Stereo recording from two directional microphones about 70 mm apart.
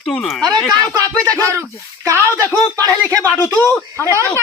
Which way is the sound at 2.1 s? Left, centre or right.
Left.